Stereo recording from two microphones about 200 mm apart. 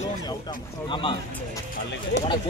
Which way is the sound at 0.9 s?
25° left (ahead or behind).